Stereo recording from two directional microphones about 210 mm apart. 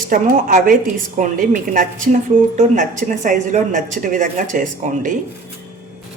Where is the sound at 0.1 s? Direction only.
40° right (ahead or behind).